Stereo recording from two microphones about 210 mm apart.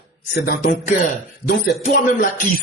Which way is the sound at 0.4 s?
40° left (ahead or behind).